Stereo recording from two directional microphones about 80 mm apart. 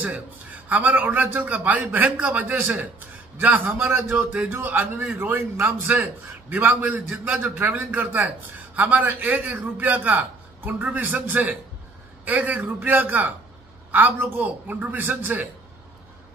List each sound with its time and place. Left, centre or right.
0.7 s a man's voice: right